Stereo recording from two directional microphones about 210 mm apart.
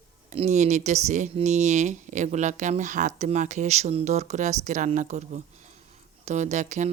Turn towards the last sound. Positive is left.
turn(degrees=-35)  # may be behind; listen again after turning